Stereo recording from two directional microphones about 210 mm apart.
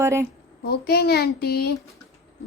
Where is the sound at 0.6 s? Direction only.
50° left (ahead or behind).